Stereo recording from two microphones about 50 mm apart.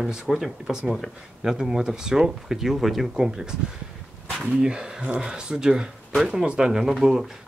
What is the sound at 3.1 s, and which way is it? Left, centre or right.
Speech, centre.